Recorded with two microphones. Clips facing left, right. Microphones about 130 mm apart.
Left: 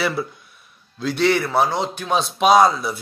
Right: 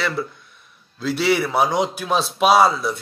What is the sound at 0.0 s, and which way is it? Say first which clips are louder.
Speech: left 1 dB; 10° left (ahead or behind).